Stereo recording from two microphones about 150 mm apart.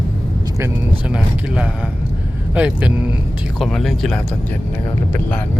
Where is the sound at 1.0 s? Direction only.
5° right (ahead or behind).